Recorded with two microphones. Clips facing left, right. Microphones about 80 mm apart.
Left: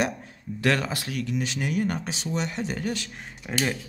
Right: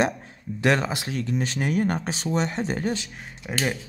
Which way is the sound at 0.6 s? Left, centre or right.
Right.